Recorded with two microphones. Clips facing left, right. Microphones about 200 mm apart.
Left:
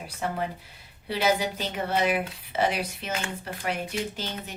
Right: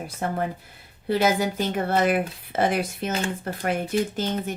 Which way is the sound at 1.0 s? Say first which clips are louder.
Right 4 dB; 50° right (ahead or behind).